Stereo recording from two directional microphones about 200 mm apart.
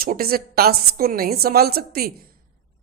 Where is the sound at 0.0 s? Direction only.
50° right (ahead or behind).